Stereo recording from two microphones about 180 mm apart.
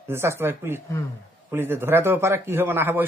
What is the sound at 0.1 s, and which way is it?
A man's voice, 15° right (ahead or behind).